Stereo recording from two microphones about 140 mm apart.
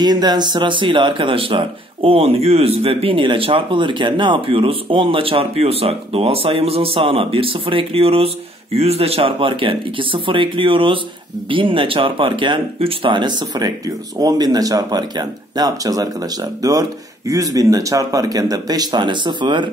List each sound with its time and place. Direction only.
0.0 s speech: 30° right (ahead or behind)